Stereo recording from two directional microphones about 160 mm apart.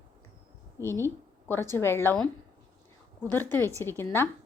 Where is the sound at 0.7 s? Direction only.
15° left (ahead or behind).